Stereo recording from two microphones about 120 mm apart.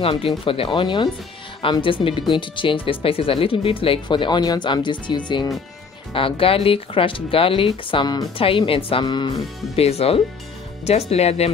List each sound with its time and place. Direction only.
0.5 s speech: 45° left (ahead or behind)
8.5 s speech: 50° left (ahead or behind)
9.0 s speech: 40° left (ahead or behind)
9.8 s speech: 55° left (ahead or behind)